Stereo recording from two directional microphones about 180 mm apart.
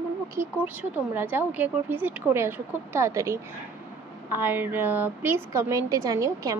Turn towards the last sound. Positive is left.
turn(degrees=-20)  # may be behind; listen again after turning